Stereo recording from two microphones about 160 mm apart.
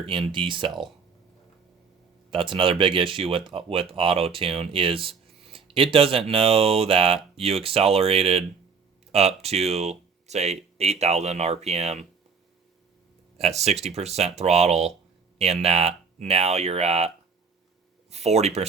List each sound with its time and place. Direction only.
0.0 s speech: 30° right (ahead or behind)
2.3 s speech: 30° right (ahead or behind)
13.4 s speech: 40° right (ahead or behind)
18.1 s speech: 40° right (ahead or behind)